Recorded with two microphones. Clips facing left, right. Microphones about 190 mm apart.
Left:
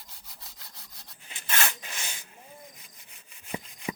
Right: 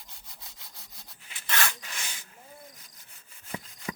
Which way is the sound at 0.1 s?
Centre (ahead or behind).